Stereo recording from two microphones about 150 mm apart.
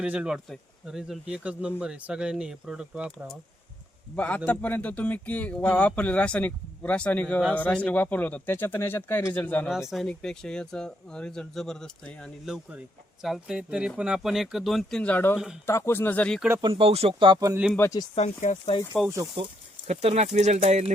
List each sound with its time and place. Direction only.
0.0 s speech: 5° right (ahead or behind)
4.1 s speech: 10° left (ahead or behind)
16.6 s speech: 40° right (ahead or behind)
17.7 s speech: 20° left (ahead or behind)
18.1 s speech: 50° left (ahead or behind)
19.4 s speech: 35° right (ahead or behind)
19.9 s speech: 45° right (ahead or behind)